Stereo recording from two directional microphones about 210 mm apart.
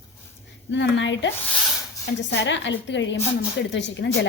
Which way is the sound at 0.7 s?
60° left (ahead or behind).